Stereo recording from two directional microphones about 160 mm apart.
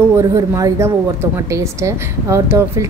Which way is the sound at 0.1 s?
20° right (ahead or behind).